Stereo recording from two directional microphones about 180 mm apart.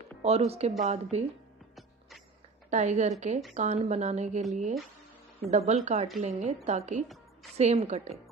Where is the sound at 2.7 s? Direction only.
40° right (ahead or behind).